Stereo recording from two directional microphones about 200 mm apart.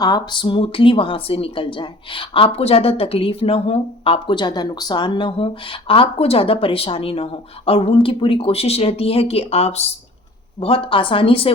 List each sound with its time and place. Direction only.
0.0 s a woman's voice: 20° left (ahead or behind)